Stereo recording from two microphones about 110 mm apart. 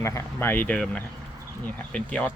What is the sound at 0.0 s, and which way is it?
Speech, 25° left (ahead or behind).